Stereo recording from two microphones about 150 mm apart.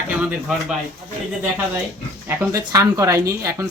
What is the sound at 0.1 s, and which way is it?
Speech, 10° right (ahead or behind).